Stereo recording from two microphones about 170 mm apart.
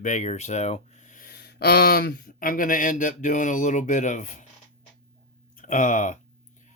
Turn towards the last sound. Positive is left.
turn(degrees=45)  # may be behind; listen again after turning